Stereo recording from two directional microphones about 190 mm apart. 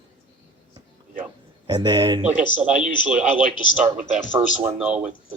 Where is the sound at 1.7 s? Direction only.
20° right (ahead or behind).